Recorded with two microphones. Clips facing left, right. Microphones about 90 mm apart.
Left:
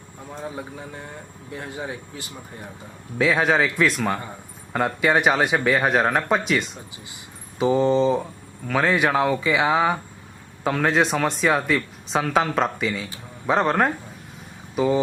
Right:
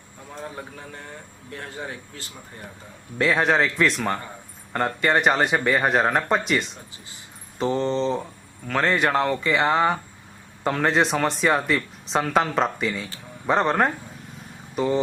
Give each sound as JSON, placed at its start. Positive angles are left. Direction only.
{"t": 0.3, "sound": "speech", "side_deg": 10}
{"t": 3.2, "sound": "speech", "side_deg": 0}